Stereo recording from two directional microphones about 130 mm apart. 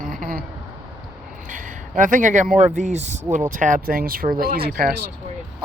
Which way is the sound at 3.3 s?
80° right.